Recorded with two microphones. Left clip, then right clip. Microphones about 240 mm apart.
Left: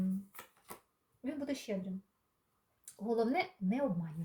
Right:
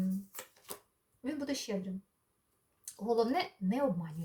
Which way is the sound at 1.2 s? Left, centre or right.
Right.